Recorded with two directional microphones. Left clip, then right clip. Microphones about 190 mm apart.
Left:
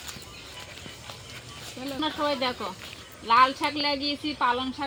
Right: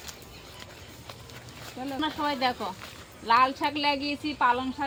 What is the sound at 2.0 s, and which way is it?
Speech, centre (ahead or behind).